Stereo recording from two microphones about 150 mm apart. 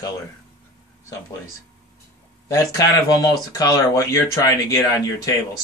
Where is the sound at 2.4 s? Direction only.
20° left (ahead or behind).